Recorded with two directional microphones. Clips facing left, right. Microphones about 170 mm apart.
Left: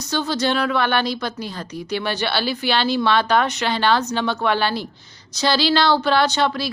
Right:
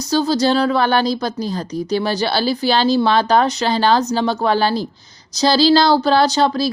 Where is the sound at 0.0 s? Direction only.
35° right (ahead or behind).